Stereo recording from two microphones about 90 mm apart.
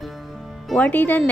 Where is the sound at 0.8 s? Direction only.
20° left (ahead or behind).